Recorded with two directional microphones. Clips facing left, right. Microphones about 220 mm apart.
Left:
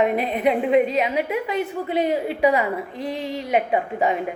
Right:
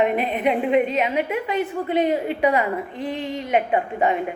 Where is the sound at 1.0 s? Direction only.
10° left (ahead or behind).